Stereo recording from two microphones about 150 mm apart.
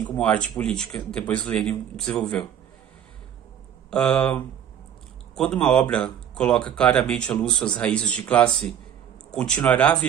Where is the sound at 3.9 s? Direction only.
5° left (ahead or behind).